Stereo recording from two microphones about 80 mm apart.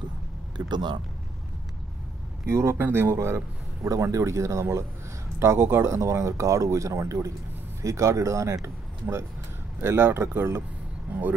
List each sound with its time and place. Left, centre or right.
0.7 s speech: right
2.4 s a man's voice: right
9.8 s speech: right